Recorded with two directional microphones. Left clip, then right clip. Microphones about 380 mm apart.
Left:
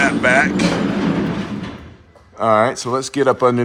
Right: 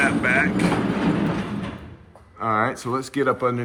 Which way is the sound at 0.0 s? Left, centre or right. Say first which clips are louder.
Left 6 dB; centre.